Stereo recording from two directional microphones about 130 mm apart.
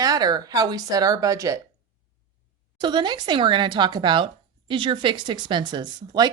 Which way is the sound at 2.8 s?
35° right (ahead or behind).